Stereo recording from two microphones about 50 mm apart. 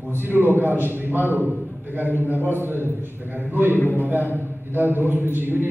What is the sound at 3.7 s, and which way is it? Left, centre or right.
Speech, left.